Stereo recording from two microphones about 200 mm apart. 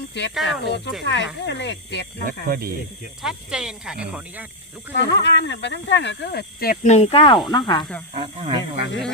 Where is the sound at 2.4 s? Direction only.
45° right (ahead or behind).